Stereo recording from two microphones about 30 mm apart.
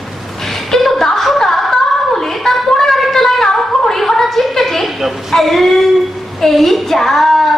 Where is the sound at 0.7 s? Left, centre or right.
Centre.